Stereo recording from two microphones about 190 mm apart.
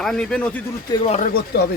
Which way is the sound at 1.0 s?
35° left (ahead or behind).